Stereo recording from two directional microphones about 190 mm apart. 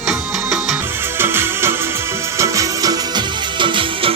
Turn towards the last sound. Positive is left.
turn(degrees=-25)  # may be behind; listen again after turning